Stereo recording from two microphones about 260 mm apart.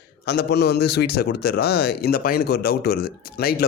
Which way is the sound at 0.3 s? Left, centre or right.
Left.